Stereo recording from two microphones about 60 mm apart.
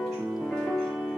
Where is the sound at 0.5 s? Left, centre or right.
Centre.